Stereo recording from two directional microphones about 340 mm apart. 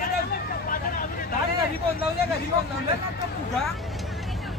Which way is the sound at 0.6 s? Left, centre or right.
Left.